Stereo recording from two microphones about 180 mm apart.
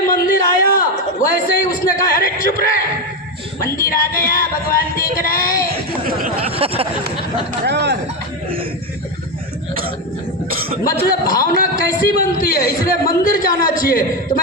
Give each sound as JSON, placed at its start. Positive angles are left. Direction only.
{"t": 0.1, "sound": "a sound", "side_deg": 55}
{"t": 1.3, "sound": "a man's voice", "side_deg": 50}
{"t": 3.8, "sound": "a man's voice", "side_deg": 55}
{"t": 6.5, "sound": "a sound", "side_deg": -30}
{"t": 7.6, "sound": "speech", "side_deg": -70}
{"t": 11.0, "sound": "a man's voice", "side_deg": 55}